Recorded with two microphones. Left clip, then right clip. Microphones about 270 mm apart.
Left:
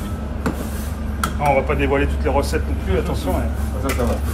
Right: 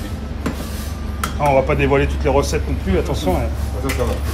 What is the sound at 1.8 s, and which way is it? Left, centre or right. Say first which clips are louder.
Speech: right 3 dB; right.